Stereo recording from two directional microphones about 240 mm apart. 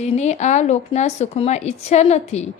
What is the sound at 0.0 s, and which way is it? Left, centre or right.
A woman's voice, left.